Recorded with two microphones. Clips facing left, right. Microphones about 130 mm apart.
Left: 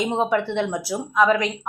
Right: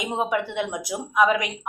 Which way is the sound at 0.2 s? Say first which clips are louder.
Even; 15° right (ahead or behind).